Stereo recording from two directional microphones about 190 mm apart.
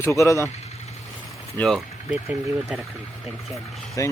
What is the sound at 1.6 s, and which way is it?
Speech, centre (ahead or behind).